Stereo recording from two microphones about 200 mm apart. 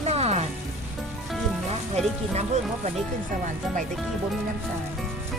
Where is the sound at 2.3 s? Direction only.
35° right (ahead or behind).